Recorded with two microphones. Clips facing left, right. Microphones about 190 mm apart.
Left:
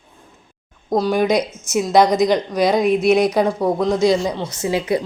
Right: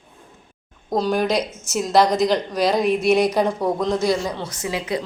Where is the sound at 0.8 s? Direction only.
10° left (ahead or behind).